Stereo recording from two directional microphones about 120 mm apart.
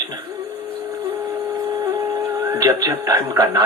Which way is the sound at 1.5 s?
35° right (ahead or behind).